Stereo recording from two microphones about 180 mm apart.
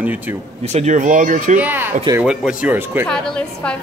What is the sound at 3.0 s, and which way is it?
Speech, 5° left (ahead or behind).